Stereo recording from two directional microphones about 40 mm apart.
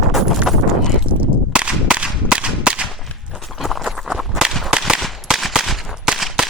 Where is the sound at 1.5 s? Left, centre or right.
Right.